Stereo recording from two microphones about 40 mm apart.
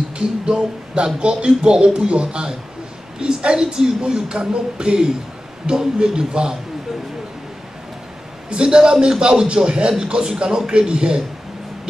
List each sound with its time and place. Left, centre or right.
0.5 s speech: centre
8.5 s speech: centre